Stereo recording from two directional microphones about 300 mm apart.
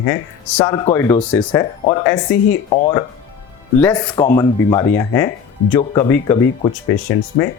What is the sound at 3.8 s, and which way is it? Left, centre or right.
Speech, centre.